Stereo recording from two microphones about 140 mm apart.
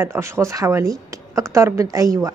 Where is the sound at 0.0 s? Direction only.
20° right (ahead or behind).